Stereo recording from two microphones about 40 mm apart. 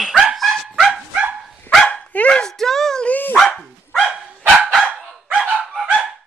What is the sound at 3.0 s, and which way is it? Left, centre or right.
Dog, left.